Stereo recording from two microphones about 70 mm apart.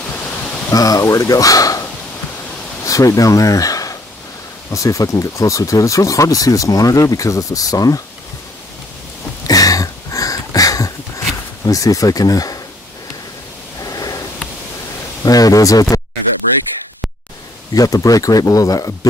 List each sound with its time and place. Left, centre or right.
0.7 s speech: left
9.5 s a sound: left
11.6 s speech: left
13.7 s a sound: left
15.2 s speech: left
17.7 s speech: left